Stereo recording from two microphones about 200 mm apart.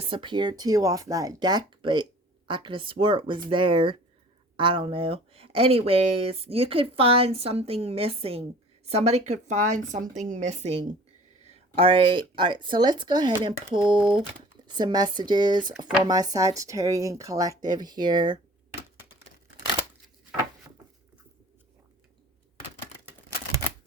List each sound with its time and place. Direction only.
0.0 s speech: 25° right (ahead or behind)